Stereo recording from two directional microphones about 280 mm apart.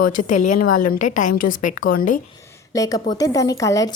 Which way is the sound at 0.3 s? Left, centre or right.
Left.